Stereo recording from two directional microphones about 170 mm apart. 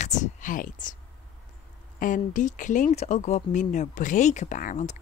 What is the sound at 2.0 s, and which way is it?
Speech, 50° left (ahead or behind).